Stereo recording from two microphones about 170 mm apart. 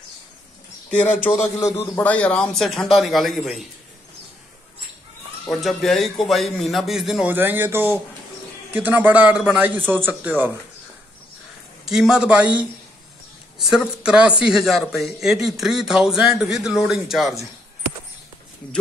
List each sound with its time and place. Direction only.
0.8 s a man's voice: 10° left (ahead or behind)
5.4 s a man's voice: centre (ahead or behind)
11.8 s a man's voice: 5° right (ahead or behind)